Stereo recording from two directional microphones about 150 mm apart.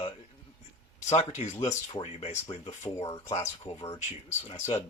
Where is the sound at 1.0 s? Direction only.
50° left (ahead or behind).